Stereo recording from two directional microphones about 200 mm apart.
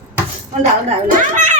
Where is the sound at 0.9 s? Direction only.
35° right (ahead or behind).